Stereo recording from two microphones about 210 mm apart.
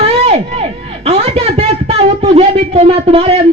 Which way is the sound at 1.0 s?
30° right (ahead or behind).